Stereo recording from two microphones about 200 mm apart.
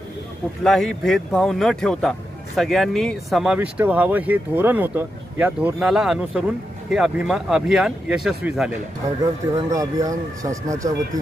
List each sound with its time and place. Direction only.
0.7 s speech: centre (ahead or behind)
9.2 s speech: 15° right (ahead or behind)